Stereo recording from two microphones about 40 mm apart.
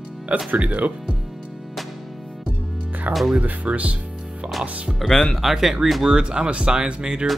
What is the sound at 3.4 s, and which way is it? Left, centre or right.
Speech, right.